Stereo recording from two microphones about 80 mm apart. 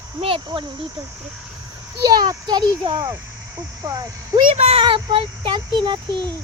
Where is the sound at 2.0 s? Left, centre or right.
Right.